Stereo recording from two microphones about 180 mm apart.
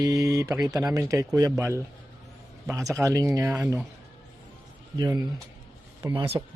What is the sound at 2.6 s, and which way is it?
Speech, 20° right (ahead or behind).